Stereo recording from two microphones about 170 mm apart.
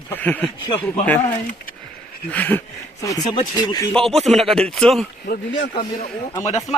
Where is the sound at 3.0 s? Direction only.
25° left (ahead or behind).